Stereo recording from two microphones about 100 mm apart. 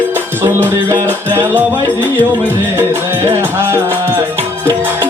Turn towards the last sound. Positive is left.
turn(degrees=-25)  # may be behind; listen again after turning